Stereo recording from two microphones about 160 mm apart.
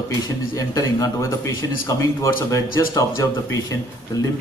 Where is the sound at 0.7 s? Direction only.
20° left (ahead or behind).